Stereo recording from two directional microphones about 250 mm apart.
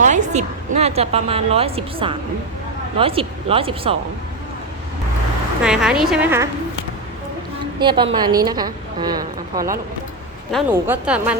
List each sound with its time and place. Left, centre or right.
0.0 s a woman's voice: right
5.6 s a woman's voice: centre
7.8 s a woman's voice: centre